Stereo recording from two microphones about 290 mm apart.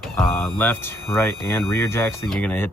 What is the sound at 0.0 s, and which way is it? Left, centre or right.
Speech, centre.